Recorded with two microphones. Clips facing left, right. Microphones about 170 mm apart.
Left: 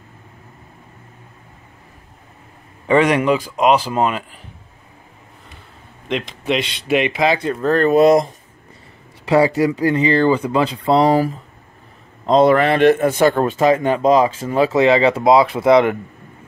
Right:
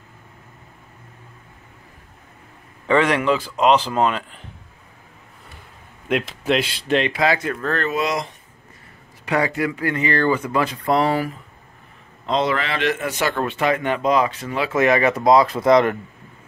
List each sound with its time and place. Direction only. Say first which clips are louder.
2.9 s speech: left 3 dB; 15° left (ahead or behind)
6.0 s speech: even; 5° right (ahead or behind)
6.9 s speech: left 3 dB; 15° left (ahead or behind); by 8.3 s 50° left (ahead or behind)
9.2 s a man's voice: left 7 dB; 30° left (ahead or behind)
13.6 s speech: left 6 dB; 30° left (ahead or behind)
15.5 s speech: left 3 dB; 10° left (ahead or behind)